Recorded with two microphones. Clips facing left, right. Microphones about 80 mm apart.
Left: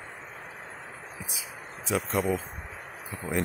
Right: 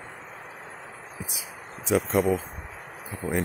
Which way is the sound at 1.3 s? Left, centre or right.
Centre.